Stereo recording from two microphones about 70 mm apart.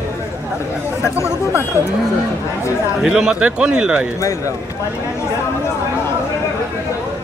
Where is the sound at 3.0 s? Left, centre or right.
Centre.